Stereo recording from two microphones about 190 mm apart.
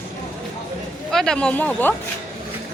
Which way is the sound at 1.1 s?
5° left (ahead or behind).